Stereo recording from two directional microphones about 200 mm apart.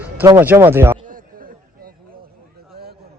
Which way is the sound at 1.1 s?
45° right (ahead or behind).